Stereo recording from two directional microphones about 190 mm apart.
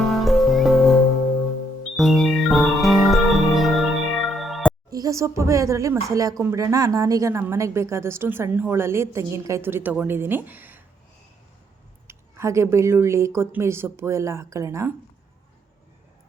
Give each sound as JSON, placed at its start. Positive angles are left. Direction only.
{"t": 0.2, "sound": "music", "side_deg": 0}
{"t": 2.0, "sound": "music", "side_deg": 0}
{"t": 4.9, "sound": "a sound", "side_deg": -20}
{"t": 5.4, "sound": "a woman's voice", "side_deg": -15}
{"t": 12.0, "sound": "a woman's voice", "side_deg": -15}